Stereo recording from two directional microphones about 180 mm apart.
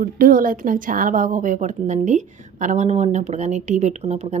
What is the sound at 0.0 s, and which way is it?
A woman's voice, 50° right (ahead or behind).